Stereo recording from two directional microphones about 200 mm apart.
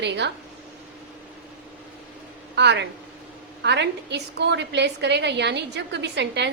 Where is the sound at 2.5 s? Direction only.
60° right (ahead or behind).